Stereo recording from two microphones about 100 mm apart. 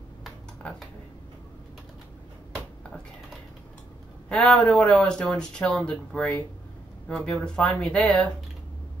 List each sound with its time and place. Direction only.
4.3 s speech: 5° left (ahead or behind)